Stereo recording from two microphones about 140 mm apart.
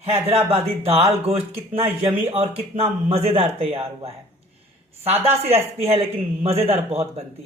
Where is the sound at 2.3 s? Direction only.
45° right (ahead or behind).